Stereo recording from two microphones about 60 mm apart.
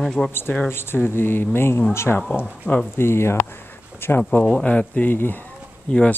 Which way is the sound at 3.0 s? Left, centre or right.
Left.